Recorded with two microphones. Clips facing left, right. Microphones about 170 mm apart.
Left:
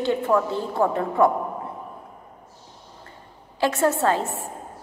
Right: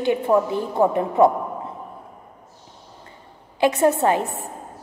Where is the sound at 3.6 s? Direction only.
15° right (ahead or behind).